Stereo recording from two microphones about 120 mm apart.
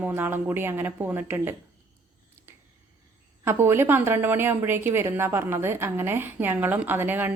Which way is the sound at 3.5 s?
20° right (ahead or behind).